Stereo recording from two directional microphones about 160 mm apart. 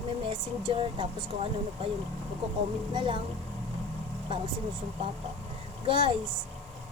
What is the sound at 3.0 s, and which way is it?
Speech, 30° right (ahead or behind).